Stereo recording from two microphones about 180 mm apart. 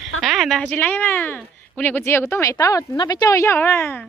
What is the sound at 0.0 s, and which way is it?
A woman's voice, centre (ahead or behind).